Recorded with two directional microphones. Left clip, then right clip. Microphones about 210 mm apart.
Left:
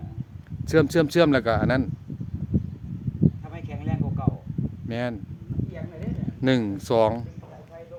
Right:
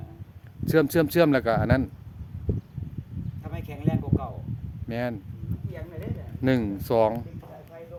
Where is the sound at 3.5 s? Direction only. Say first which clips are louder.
Right 3 dB; 55° right (ahead or behind).